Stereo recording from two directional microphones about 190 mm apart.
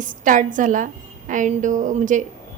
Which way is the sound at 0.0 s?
45° right (ahead or behind).